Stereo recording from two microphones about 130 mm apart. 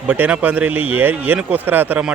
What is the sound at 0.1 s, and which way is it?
Speech, 10° right (ahead or behind).